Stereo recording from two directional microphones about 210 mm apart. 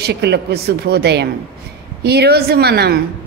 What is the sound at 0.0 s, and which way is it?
A woman's voice, 50° right (ahead or behind).